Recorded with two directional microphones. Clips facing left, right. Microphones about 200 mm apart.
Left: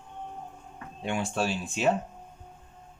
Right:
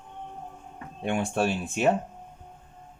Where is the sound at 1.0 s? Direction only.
55° right (ahead or behind).